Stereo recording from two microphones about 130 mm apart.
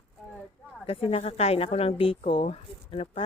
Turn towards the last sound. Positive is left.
turn(degrees=50)  # may be behind; listen again after turning